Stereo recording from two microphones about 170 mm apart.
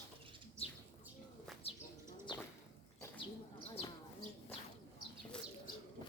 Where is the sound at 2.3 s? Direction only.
25° left (ahead or behind).